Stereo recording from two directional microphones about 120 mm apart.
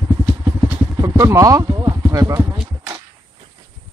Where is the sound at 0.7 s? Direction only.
20° right (ahead or behind).